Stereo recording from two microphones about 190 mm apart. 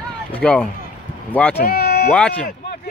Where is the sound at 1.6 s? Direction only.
55° left (ahead or behind).